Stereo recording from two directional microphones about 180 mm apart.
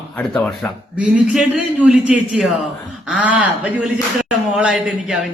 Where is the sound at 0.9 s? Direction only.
5° right (ahead or behind).